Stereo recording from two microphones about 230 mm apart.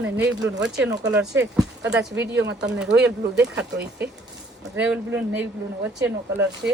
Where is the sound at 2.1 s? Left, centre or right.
Right.